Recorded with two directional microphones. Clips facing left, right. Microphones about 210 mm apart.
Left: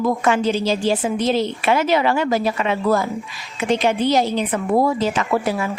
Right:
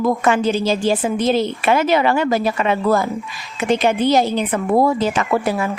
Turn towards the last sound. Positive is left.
turn(degrees=-50)  # may be behind; listen again after turning